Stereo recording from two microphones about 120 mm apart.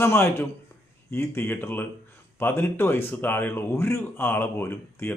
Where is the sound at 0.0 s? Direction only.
20° left (ahead or behind).